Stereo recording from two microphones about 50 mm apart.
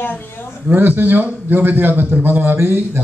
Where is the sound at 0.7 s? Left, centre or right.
Right.